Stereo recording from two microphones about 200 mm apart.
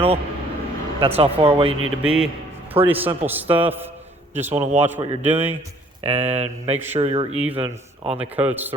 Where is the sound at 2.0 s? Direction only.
5° right (ahead or behind).